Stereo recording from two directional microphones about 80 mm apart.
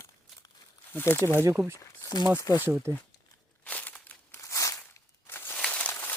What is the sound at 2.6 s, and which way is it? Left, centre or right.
Speech, right.